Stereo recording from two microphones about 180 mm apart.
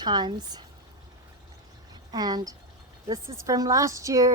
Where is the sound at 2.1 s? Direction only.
20° right (ahead or behind).